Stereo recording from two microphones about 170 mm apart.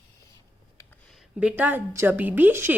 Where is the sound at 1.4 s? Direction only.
5° right (ahead or behind).